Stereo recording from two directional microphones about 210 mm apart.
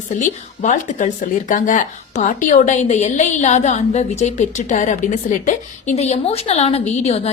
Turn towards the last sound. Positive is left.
turn(degrees=30)  # may be behind; listen again after turning